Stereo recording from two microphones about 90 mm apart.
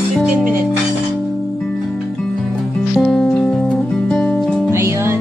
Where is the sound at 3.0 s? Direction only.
5° left (ahead or behind).